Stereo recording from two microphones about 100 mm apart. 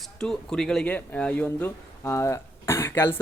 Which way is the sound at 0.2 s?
5° left (ahead or behind).